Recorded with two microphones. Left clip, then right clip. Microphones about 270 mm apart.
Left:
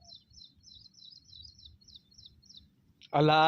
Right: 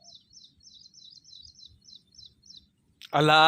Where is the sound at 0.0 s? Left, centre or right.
Right.